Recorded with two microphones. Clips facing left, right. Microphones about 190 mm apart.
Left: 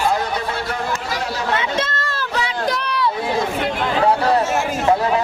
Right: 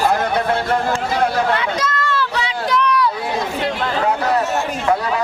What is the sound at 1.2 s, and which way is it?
Chatter, 55° right (ahead or behind).